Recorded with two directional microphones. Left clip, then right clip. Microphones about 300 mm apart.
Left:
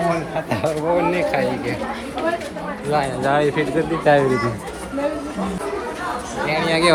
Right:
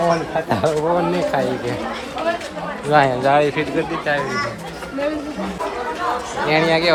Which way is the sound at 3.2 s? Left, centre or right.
Centre.